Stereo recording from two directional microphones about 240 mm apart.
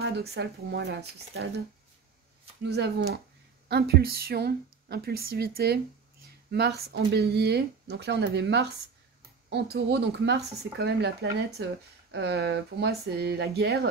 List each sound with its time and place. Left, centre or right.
0.0 s speech: right
2.6 s speech: right